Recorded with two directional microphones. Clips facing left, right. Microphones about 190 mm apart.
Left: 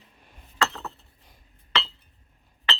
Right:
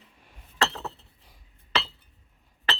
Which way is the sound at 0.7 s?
30° right (ahead or behind).